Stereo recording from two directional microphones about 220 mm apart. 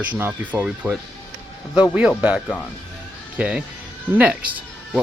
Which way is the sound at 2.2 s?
5° right (ahead or behind).